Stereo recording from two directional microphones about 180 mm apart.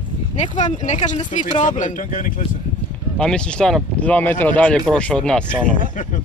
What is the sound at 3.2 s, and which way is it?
Speech, 5° left (ahead or behind).